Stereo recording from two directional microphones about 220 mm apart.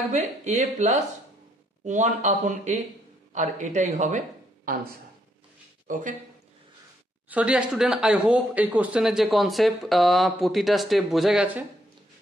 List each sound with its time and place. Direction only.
0.1 s speech: 30° right (ahead or behind)
5.9 s a man's voice: 35° right (ahead or behind)
7.2 s speech: 5° right (ahead or behind)